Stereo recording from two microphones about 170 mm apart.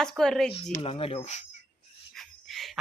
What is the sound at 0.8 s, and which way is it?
Speech, 35° left (ahead or behind).